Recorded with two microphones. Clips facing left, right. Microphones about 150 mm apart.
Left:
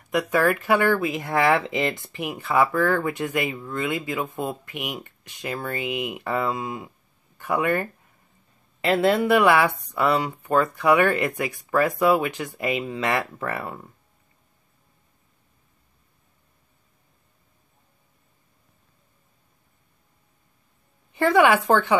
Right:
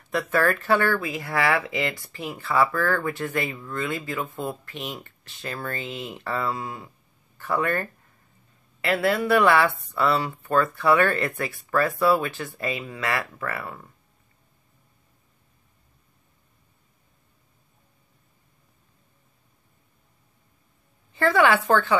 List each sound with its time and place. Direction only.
0.1 s speech: 15° left (ahead or behind)
21.1 s speech: 15° left (ahead or behind)